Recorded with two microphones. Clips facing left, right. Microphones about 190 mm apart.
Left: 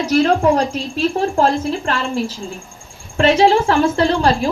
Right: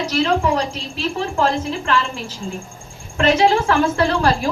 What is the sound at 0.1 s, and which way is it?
Speech, 50° left (ahead or behind).